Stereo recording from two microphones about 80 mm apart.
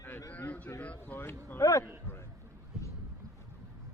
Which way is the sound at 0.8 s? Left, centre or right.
Left.